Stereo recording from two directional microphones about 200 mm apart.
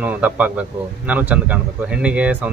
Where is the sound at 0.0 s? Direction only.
5° right (ahead or behind).